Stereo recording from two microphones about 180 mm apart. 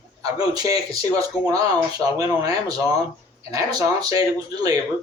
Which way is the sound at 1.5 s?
20° right (ahead or behind).